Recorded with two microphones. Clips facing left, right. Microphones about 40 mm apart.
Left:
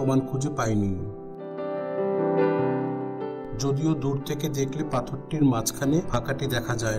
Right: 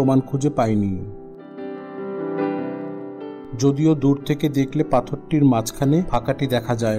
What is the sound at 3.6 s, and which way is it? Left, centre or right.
Speech, right.